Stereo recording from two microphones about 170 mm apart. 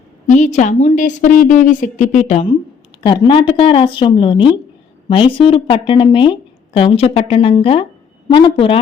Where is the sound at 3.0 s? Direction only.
30° left (ahead or behind).